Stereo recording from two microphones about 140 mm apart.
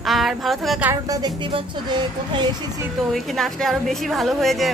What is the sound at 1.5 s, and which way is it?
Speech, 35° right (ahead or behind).